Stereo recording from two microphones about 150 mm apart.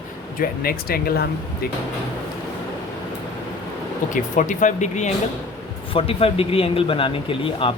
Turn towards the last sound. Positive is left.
turn(degrees=35)  # may be behind; listen again after turning